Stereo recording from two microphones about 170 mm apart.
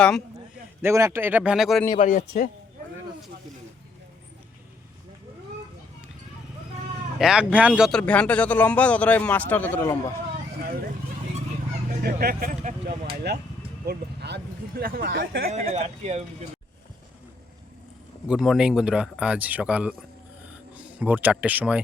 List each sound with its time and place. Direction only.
0.8 s speech: 15° right (ahead or behind)
1.9 s a man's voice: 50° left (ahead or behind)
7.2 s a man's voice: 5° right (ahead or behind); by 10.0 s 15° left (ahead or behind)
10.6 s vehicle: 60° right (ahead or behind)
12.0 s speech: 65° right (ahead or behind)
13.8 s speech: 75° right (ahead or behind)
15.4 s speech: 40° right (ahead or behind)
18.3 s speech: centre (ahead or behind)